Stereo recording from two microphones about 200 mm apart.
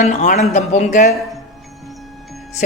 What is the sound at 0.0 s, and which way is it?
A woman's voice, 35° left (ahead or behind).